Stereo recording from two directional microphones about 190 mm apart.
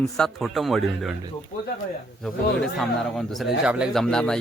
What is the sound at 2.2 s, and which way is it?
Speech, centre (ahead or behind).